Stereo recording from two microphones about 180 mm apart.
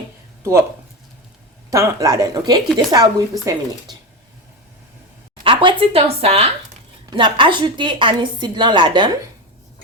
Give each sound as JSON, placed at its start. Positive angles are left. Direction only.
{"t": 1.7, "sound": "a woman's voice", "side_deg": -20}
{"t": 5.4, "sound": "a woman's voice", "side_deg": -30}